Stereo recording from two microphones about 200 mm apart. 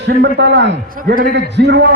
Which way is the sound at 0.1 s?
55° right (ahead or behind).